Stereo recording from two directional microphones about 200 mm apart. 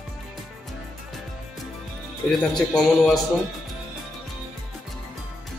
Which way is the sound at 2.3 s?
5° left (ahead or behind).